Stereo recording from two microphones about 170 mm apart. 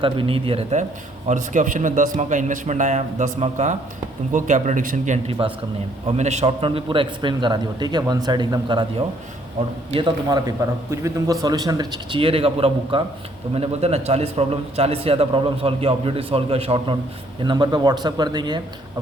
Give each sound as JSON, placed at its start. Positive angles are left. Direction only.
{"t": 0.0, "sound": "a man's voice", "side_deg": -30}
{"t": 9.9, "sound": "a man's voice", "side_deg": -25}